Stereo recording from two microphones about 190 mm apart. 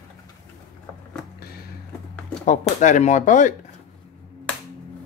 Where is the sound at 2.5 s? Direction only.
40° left (ahead or behind).